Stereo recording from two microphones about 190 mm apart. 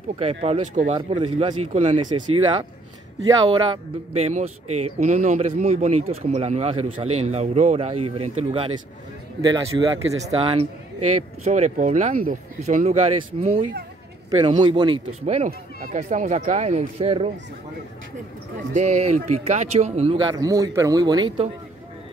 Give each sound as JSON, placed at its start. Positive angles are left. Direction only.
{"t": 0.2, "sound": "a man's voice", "side_deg": -35}
{"t": 0.9, "sound": "speech", "side_deg": -25}
{"t": 1.7, "sound": "a man's voice", "side_deg": -40}
{"t": 2.1, "sound": "speech", "side_deg": -25}
{"t": 4.1, "sound": "a man's voice", "side_deg": -35}
{"t": 9.4, "sound": "speech", "side_deg": -20}
{"t": 10.2, "sound": "a man's voice", "side_deg": -30}
{"t": 15.3, "sound": "a man's voice", "side_deg": -40}
{"t": 18.7, "sound": "a man's voice", "side_deg": -40}
{"t": 20.2, "sound": "speech", "side_deg": -20}